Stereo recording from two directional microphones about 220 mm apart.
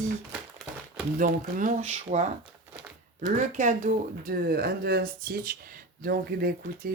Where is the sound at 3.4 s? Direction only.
35° right (ahead or behind).